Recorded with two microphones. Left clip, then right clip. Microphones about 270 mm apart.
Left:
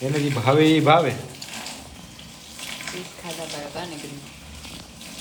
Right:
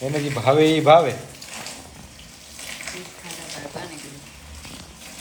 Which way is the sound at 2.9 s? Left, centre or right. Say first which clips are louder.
Left 2 dB; centre.